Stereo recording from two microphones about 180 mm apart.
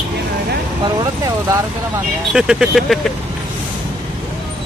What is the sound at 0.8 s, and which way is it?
Speech, 20° right (ahead or behind).